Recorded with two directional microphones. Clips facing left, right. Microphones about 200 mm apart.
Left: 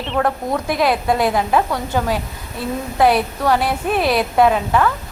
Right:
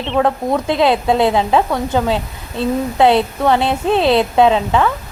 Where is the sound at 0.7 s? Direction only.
25° right (ahead or behind).